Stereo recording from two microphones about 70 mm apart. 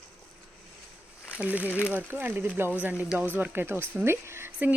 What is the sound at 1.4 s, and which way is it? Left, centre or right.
Speech, right.